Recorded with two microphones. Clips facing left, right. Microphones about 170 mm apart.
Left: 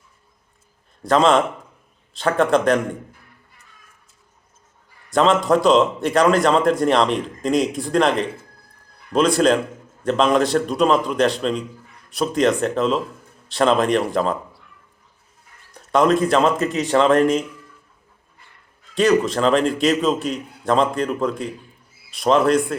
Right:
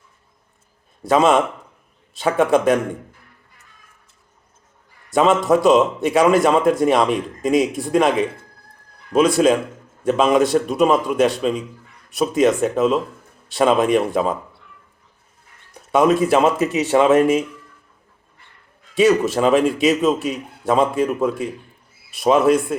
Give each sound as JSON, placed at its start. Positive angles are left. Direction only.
{"t": 1.0, "sound": "a man's voice", "side_deg": -5}
{"t": 5.1, "sound": "a man's voice", "side_deg": -5}
{"t": 15.7, "sound": "speech", "side_deg": -5}
{"t": 18.9, "sound": "a man's voice", "side_deg": -5}